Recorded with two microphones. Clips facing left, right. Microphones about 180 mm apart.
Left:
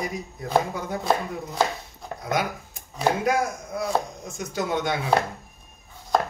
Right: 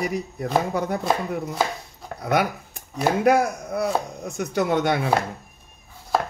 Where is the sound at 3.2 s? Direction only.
65° right (ahead or behind).